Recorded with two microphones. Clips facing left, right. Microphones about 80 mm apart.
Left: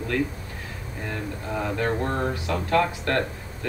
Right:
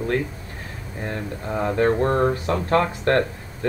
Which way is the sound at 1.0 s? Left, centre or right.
Right.